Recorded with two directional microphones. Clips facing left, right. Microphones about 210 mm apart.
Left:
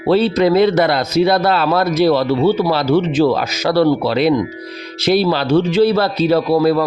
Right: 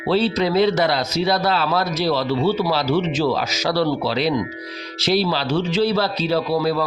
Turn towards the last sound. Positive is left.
turn(degrees=55)  # may be behind; listen again after turning